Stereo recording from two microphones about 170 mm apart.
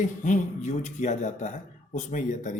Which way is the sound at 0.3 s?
45° left (ahead or behind).